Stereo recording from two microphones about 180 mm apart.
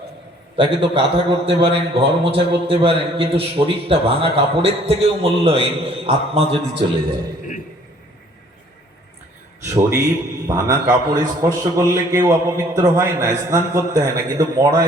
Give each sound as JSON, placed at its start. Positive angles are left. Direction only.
{"t": 0.5, "sound": "a man's voice", "side_deg": -30}
{"t": 10.4, "sound": "a man's voice", "side_deg": -15}